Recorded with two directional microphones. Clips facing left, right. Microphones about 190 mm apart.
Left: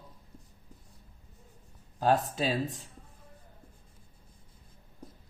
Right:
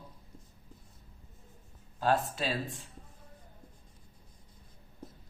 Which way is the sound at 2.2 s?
40° left (ahead or behind).